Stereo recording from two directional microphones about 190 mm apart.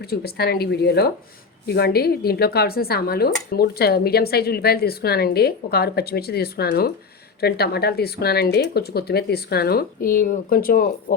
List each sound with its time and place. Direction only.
0.0 s speech: 55° left (ahead or behind)